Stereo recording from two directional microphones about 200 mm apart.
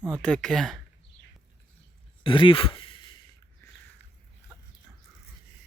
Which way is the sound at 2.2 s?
25° left (ahead or behind).